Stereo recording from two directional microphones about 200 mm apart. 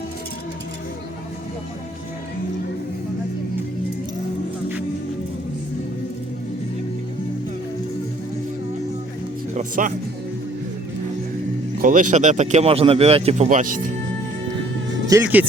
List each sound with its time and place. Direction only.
9.6 s speech: 40° right (ahead or behind)
11.8 s speech: 40° right (ahead or behind)
15.0 s speech: 10° right (ahead or behind)